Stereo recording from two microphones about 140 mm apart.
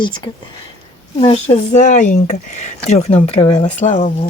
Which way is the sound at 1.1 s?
50° left (ahead or behind).